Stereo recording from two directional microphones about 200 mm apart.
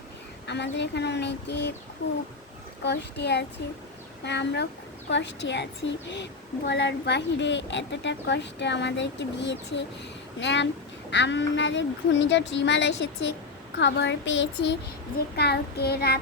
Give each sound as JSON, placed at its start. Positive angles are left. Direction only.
{"t": 0.4, "sound": "a woman's voice", "side_deg": 60}
{"t": 2.8, "sound": "a woman's voice", "side_deg": 60}
{"t": 15.4, "sound": "child singing", "side_deg": 55}